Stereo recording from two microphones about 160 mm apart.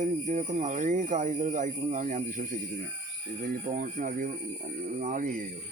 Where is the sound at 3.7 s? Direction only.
60° right (ahead or behind).